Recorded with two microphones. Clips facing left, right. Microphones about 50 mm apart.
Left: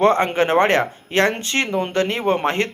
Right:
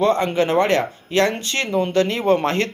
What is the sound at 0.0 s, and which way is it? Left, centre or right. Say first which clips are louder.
Speech: left 2 dB; left.